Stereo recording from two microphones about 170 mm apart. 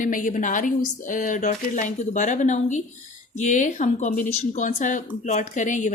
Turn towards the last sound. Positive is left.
turn(degrees=45)  # may be behind; listen again after turning